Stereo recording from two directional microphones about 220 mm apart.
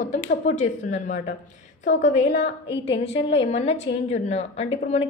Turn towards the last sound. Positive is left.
turn(degrees=25)  # may be behind; listen again after turning